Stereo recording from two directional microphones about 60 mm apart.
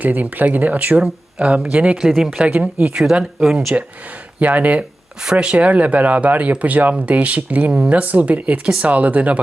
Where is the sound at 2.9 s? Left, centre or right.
Centre.